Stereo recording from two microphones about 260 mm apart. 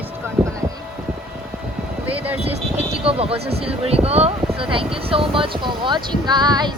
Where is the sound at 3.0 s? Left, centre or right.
Right.